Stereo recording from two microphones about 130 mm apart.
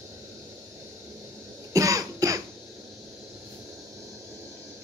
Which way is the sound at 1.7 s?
25° right (ahead or behind).